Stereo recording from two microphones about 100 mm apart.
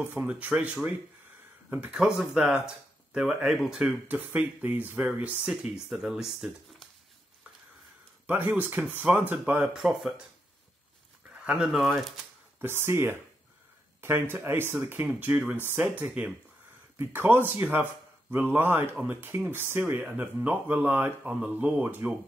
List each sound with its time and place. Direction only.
0.1 s speech: 15° right (ahead or behind)
1.7 s speech: 10° right (ahead or behind)
4.1 s speech: 15° right (ahead or behind); by 6.9 s centre (ahead or behind)
8.3 s speech: 15° right (ahead or behind)
9.8 s speech: 5° right (ahead or behind)
11.2 s speech: 15° right (ahead or behind)
12.5 s speech: 25° right (ahead or behind)